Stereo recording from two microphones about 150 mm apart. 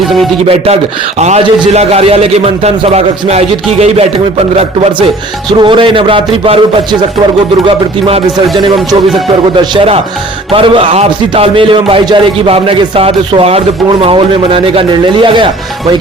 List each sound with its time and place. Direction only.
1.2 s a man's voice: 45° right (ahead or behind)
5.5 s a man's voice: 30° right (ahead or behind)
8.0 s a man's voice: 35° right (ahead or behind)
10.5 s a man's voice: 35° right (ahead or behind)